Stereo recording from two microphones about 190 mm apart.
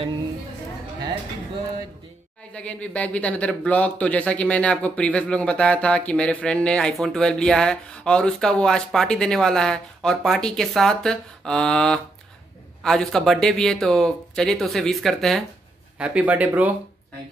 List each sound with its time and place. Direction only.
2.5 s speech: 5° left (ahead or behind)